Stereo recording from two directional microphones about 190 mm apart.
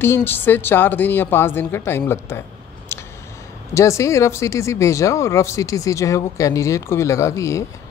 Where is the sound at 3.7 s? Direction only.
15° left (ahead or behind).